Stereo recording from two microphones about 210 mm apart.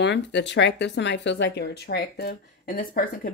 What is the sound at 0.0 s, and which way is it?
Speech, 55° left (ahead or behind).